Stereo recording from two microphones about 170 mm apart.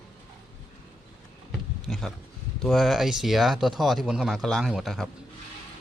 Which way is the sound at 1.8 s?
Centre (ahead or behind).